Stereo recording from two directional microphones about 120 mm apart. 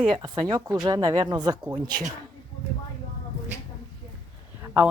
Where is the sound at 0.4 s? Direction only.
35° right (ahead or behind).